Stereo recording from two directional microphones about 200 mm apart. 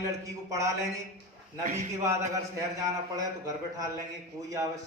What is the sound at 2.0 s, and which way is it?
A man's voice, 15° right (ahead or behind).